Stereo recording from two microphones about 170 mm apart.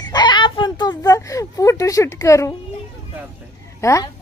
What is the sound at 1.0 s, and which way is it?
A woman's voice, 20° left (ahead or behind).